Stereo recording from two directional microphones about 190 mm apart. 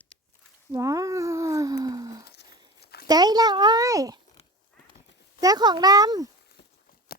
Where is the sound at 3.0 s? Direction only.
20° right (ahead or behind).